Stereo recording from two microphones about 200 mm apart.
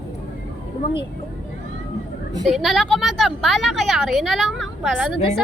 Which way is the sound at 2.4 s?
Centre (ahead or behind).